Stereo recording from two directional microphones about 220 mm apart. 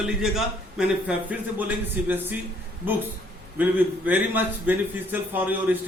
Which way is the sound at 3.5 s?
5° right (ahead or behind).